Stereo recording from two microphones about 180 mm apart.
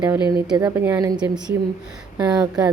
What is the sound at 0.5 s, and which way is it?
A woman's voice, 25° right (ahead or behind).